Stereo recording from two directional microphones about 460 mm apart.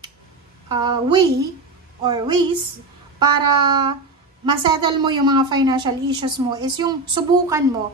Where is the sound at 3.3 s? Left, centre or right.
Right.